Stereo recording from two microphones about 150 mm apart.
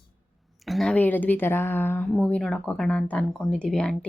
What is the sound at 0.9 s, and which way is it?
A woman's voice, 10° left (ahead or behind).